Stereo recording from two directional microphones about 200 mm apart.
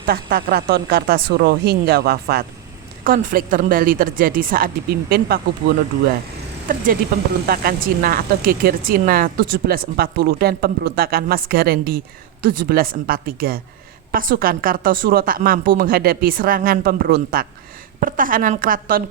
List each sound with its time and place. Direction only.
0.0 s speech: 50° right (ahead or behind)